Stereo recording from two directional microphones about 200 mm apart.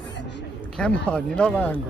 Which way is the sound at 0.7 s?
5° left (ahead or behind).